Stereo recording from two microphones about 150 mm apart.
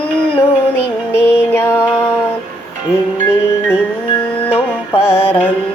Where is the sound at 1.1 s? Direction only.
15° left (ahead or behind).